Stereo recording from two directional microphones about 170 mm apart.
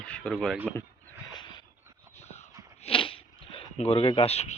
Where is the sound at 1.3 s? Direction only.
25° left (ahead or behind).